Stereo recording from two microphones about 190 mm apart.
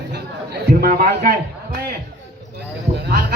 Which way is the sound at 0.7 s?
45° right (ahead or behind).